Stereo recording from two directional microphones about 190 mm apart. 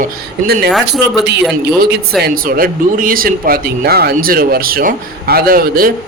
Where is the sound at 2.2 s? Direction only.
50° right (ahead or behind).